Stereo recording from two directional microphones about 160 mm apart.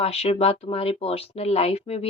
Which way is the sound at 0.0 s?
40° left (ahead or behind).